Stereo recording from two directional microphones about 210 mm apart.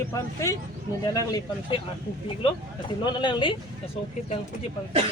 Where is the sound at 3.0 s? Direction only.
20° left (ahead or behind).